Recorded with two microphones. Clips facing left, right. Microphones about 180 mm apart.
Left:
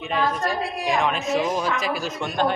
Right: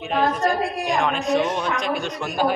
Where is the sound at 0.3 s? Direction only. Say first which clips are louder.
Right 4 dB; centre (ahead or behind).